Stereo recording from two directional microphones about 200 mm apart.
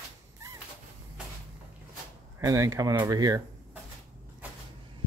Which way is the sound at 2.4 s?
15° right (ahead or behind).